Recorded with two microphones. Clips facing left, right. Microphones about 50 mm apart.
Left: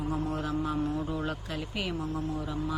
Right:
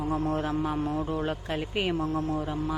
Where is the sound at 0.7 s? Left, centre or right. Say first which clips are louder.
Right 1 dB; centre.